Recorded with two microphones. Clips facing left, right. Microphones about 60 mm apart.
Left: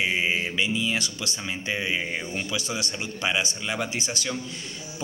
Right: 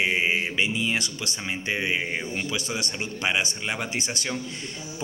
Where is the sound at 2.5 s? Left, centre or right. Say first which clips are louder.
Even; right.